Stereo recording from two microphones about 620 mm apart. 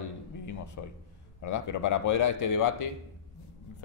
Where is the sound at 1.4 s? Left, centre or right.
Left.